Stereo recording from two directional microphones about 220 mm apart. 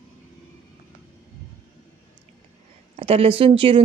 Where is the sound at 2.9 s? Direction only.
25° right (ahead or behind).